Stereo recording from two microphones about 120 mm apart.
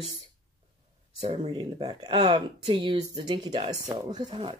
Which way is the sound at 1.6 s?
45° right (ahead or behind).